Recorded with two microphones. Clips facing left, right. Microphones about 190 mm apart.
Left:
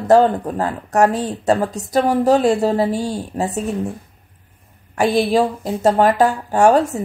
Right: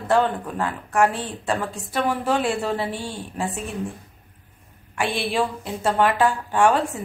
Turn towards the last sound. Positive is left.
turn(degrees=40)  # may be behind; listen again after turning